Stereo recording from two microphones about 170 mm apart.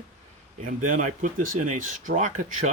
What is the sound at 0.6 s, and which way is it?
Speech, 50° right (ahead or behind).